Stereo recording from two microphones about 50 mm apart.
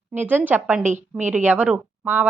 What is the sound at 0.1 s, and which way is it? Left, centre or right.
A woman's voice, right.